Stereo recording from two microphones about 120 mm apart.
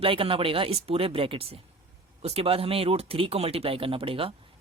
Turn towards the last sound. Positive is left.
turn(degrees=-50)  # may be behind; listen again after turning